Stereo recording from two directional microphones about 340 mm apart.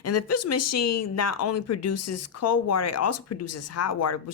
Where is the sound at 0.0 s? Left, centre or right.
Left.